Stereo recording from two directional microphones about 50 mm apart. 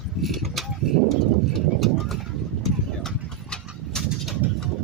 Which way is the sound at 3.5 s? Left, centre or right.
Centre.